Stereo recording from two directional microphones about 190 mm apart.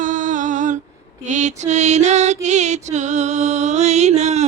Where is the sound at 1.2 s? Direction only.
40° right (ahead or behind).